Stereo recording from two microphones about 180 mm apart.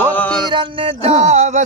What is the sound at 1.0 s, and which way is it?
Speech, 35° right (ahead or behind).